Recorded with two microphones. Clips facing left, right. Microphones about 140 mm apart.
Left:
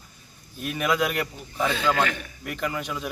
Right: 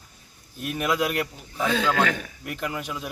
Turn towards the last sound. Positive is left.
turn(degrees=-5)  # may be behind; listen again after turning